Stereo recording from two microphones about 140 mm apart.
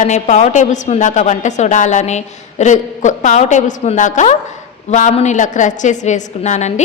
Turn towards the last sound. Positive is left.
turn(degrees=55)  # may be behind; listen again after turning